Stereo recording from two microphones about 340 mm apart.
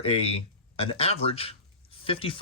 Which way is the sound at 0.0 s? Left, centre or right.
Centre.